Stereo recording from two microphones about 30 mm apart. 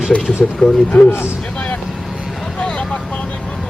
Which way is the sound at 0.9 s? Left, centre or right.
Left.